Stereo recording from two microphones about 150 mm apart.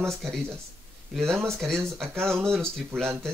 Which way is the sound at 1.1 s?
Centre (ahead or behind).